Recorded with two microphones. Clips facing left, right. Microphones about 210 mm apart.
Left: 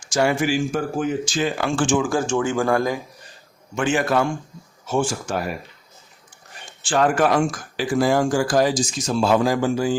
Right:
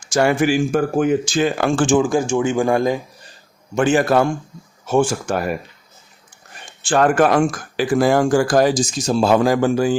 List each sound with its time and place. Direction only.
0.1 s speech: 55° right (ahead or behind); by 2.0 s 40° right (ahead or behind)
2.0 s speech: 15° right (ahead or behind)
3.8 s a man's voice: 40° right (ahead or behind)
4.9 s speech: 55° right (ahead or behind)
6.8 s speech: 55° right (ahead or behind)
9.0 s a man's voice: 35° right (ahead or behind)
9.3 s speech: 55° right (ahead or behind)